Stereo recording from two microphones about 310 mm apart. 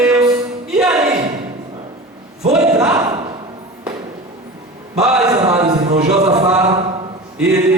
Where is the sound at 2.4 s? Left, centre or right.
Centre.